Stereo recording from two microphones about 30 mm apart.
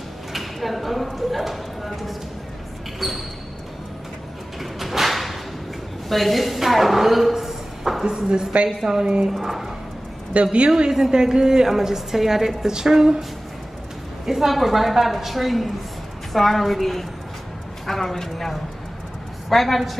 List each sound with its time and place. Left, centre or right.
0.3 s a sound: centre
1.4 s clip-clop: centre
3.0 s speech: centre
4.6 s music: centre
6.0 s a woman's voice: centre
10.3 s a woman's voice: right
10.9 s a woman's voice: centre
14.2 s a woman's voice: centre